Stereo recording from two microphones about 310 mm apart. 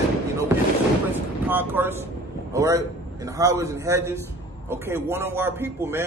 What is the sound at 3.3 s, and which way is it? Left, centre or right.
A man's voice, centre.